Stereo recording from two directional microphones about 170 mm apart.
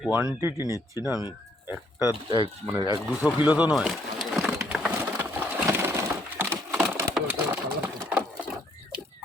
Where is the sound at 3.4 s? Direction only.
10° right (ahead or behind).